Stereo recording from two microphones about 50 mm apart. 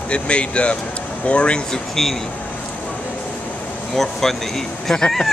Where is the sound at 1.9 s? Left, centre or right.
Centre.